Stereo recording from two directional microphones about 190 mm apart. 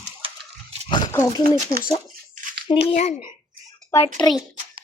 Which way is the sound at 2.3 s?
45° right (ahead or behind).